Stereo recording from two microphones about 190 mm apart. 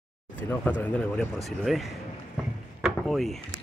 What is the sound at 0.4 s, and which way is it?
Speech, 10° left (ahead or behind).